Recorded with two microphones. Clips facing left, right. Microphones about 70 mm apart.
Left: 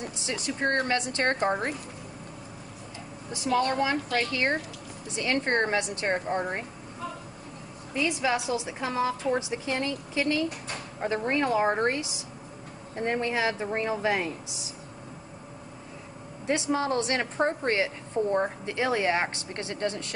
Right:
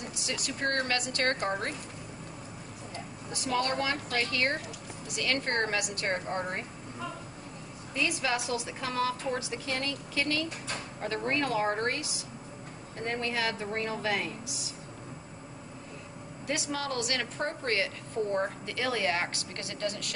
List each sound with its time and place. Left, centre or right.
0.0 s a woman's voice: left
3.5 s a woman's voice: centre
7.9 s a woman's voice: centre
16.4 s a woman's voice: left